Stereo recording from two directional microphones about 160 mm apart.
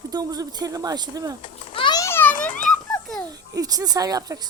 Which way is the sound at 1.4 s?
30° left (ahead or behind).